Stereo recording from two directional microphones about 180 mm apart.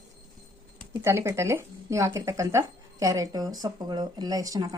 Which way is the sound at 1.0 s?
15° right (ahead or behind).